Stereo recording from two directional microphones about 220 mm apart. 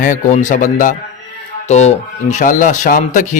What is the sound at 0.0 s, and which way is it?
Speech, 35° left (ahead or behind).